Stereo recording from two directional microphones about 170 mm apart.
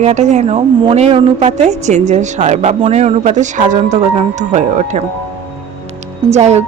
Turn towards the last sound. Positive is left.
turn(degrees=-40)  # may be behind; listen again after turning